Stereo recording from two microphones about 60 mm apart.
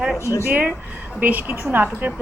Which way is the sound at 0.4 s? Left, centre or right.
Right.